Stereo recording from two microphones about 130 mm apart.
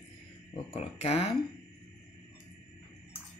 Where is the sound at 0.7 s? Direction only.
50° left (ahead or behind).